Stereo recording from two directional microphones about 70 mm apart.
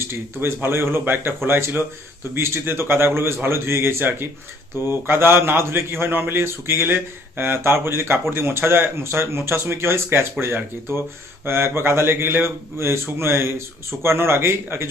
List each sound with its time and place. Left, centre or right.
0.0 s a man's voice: right